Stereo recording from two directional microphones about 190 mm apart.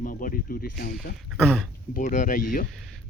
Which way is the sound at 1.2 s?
Centre (ahead or behind).